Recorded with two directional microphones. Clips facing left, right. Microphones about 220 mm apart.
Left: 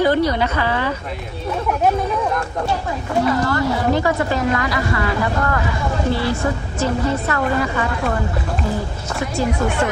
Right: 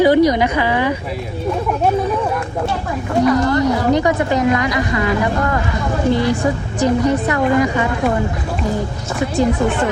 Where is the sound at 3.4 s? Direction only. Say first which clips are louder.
Right 4 dB; 20° right (ahead or behind).